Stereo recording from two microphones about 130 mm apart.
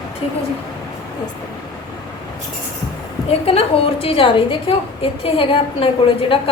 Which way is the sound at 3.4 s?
45° left (ahead or behind).